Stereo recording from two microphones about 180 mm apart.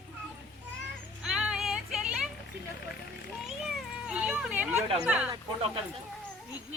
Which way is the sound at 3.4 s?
Centre (ahead or behind).